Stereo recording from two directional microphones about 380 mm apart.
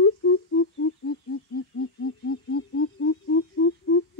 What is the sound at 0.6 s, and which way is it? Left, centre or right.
Owl, left.